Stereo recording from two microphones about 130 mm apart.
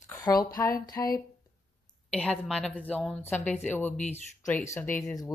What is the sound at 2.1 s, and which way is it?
Speech, 10° left (ahead or behind).